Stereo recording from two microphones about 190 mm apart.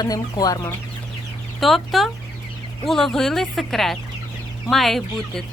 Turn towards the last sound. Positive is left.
turn(degrees=0)  # may be behind; listen again after turning